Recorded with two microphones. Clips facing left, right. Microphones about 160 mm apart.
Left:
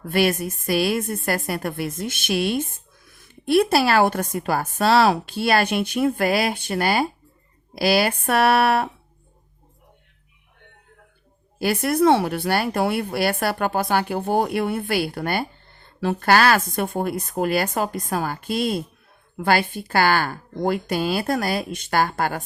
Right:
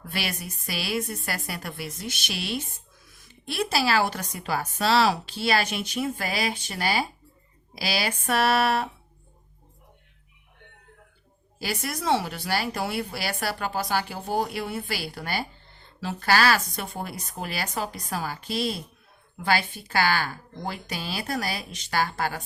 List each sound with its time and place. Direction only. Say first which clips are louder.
0.0 s a woman's voice: left 12 dB; 50° left (ahead or behind)
11.6 s a woman's voice: left 12 dB; 55° left (ahead or behind)